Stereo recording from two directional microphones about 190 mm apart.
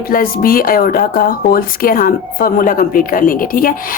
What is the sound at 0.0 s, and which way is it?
A woman's voice, 50° left (ahead or behind).